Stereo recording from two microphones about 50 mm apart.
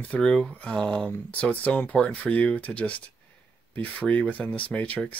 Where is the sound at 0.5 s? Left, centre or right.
Left.